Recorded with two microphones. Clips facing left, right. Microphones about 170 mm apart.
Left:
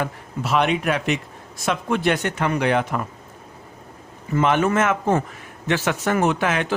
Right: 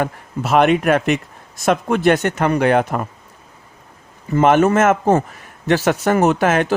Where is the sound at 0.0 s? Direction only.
50° right (ahead or behind).